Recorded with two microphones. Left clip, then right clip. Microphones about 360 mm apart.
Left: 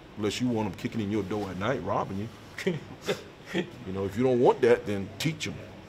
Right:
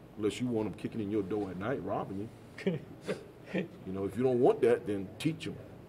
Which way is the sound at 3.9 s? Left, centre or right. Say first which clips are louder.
Left 4 dB; right.